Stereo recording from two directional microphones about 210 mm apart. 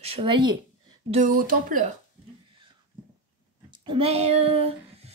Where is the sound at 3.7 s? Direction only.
25° right (ahead or behind).